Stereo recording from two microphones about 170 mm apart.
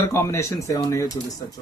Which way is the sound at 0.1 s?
15° left (ahead or behind).